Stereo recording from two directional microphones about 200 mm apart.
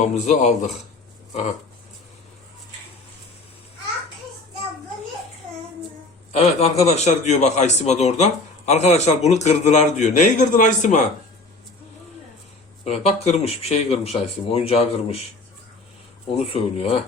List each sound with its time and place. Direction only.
0.0 s a man's voice: 35° left (ahead or behind)
6.3 s a man's voice: 30° left (ahead or behind)
12.8 s a man's voice: 30° left (ahead or behind)
16.4 s speech: 30° left (ahead or behind)